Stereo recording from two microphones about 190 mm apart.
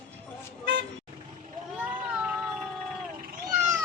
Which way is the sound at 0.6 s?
65° right (ahead or behind).